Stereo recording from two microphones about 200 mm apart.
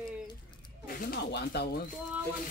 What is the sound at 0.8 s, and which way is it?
Speech, 50° left (ahead or behind).